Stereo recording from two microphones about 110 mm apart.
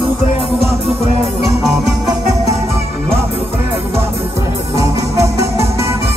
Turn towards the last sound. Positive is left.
turn(degrees=-25)  # may be behind; listen again after turning